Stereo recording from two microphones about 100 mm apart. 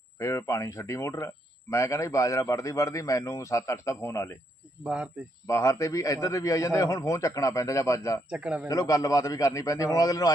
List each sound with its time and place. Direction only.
0.2 s a man's voice: 30° left (ahead or behind)
4.8 s speech: 10° right (ahead or behind)
5.5 s a man's voice: 30° left (ahead or behind)
8.3 s speech: 10° right (ahead or behind)
8.6 s a man's voice: 35° left (ahead or behind)